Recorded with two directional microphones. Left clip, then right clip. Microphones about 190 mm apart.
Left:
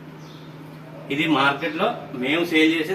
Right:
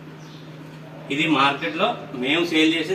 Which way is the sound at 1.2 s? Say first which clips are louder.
Even; 5° left (ahead or behind).